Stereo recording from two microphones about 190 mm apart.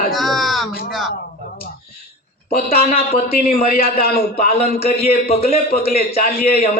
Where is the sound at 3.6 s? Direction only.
50° left (ahead or behind).